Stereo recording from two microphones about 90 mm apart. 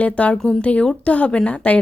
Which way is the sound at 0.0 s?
15° left (ahead or behind).